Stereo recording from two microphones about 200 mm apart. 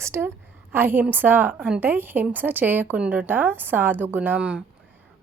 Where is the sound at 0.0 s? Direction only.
15° right (ahead or behind).